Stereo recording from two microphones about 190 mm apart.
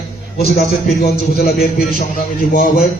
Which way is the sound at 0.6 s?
55° left (ahead or behind).